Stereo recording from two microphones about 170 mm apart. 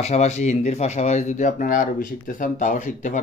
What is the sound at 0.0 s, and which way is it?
Speech, 40° left (ahead or behind).